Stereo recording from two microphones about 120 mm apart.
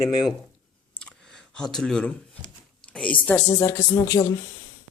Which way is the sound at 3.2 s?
15° left (ahead or behind).